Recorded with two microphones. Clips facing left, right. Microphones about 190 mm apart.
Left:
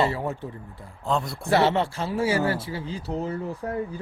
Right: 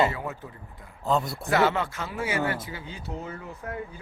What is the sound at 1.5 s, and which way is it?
Speech, 30° left (ahead or behind).